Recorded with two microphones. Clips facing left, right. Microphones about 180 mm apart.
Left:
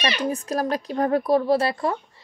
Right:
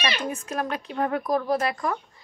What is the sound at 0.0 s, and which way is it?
A woman's voice, 35° left (ahead or behind).